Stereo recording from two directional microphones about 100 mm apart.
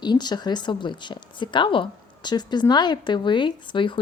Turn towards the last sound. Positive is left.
turn(degrees=55)  # may be behind; listen again after turning